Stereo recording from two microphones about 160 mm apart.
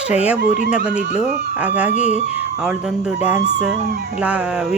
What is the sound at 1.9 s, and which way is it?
Speech, 45° left (ahead or behind).